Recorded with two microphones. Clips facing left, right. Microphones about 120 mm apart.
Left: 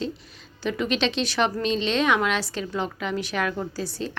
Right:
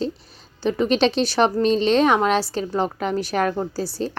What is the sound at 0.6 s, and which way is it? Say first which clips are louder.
A woman's voice: right 6 dB; 35° right (ahead or behind).